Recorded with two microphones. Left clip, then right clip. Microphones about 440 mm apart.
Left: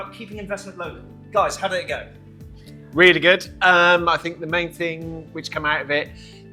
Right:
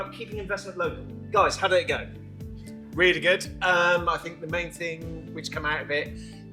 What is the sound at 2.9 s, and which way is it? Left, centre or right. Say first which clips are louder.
A man's voice: left 8 dB; left.